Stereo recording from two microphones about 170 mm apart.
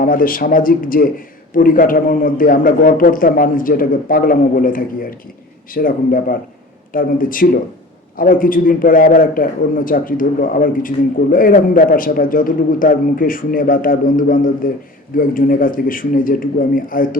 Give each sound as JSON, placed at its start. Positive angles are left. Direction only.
{"t": 0.0, "sound": "a man's voice", "side_deg": 55}